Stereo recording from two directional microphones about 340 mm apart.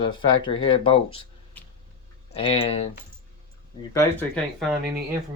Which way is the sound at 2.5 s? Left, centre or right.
Centre.